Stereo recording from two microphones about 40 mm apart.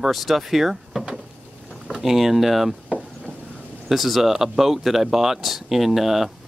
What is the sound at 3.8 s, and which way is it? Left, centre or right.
Speech, centre.